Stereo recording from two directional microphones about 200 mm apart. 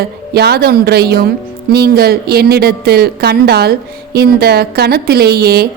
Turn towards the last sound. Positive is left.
turn(degrees=-50)  # may be behind; listen again after turning